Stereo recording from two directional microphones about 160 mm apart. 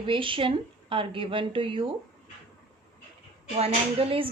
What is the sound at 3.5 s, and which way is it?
Speech, 40° right (ahead or behind).